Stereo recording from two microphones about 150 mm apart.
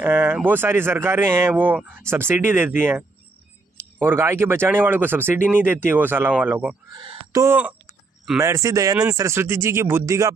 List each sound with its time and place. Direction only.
0.0 s speech: 15° right (ahead or behind)
6.9 s fowl: 25° right (ahead or behind)
7.4 s speech: 10° right (ahead or behind)